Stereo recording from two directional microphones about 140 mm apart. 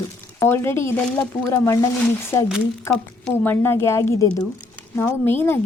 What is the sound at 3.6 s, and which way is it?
Speech, 20° left (ahead or behind).